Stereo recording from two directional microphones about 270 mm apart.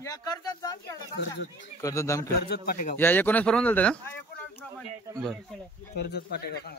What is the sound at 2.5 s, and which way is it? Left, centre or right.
Speech, left.